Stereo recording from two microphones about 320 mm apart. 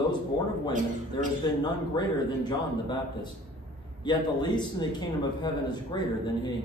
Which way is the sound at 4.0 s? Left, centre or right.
Centre.